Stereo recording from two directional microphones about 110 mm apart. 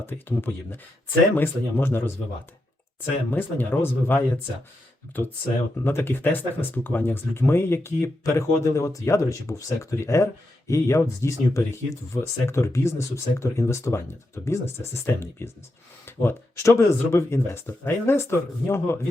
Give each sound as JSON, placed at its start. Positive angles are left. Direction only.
{"t": 0.0, "sound": "speech", "side_deg": 20}
{"t": 3.3, "sound": "speech", "side_deg": 20}
{"t": 5.8, "sound": "speech", "side_deg": 20}